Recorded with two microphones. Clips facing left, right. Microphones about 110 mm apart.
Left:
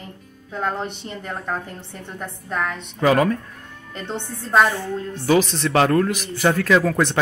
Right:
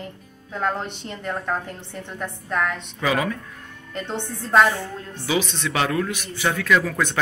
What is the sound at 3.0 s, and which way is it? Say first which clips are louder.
Speech: left 6 dB; 45° left (ahead or behind).